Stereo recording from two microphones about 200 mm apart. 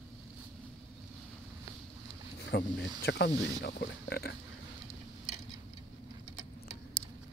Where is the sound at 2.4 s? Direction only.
60° left (ahead or behind).